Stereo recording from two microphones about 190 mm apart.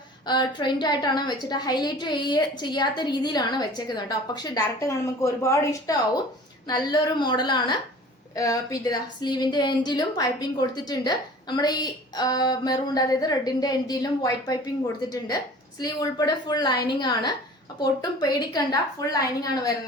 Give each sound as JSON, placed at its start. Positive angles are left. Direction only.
{"t": 0.3, "sound": "a woman's voice", "side_deg": 25}
{"t": 15.8, "sound": "a woman's voice", "side_deg": 20}